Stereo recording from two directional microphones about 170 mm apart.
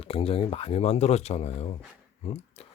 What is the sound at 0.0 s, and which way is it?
Speech, 35° left (ahead or behind).